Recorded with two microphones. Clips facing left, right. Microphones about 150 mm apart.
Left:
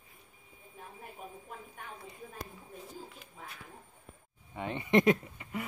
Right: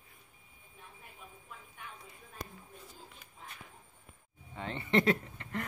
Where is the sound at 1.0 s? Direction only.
45° left (ahead or behind).